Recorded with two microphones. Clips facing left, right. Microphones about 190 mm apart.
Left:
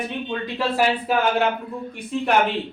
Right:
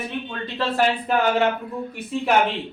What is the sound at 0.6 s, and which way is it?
Speech, 5° left (ahead or behind).